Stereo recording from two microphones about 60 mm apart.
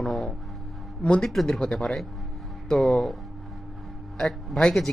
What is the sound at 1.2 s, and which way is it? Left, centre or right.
Speech, centre.